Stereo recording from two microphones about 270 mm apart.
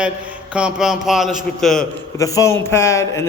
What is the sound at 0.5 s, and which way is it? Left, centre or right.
A man's voice, centre.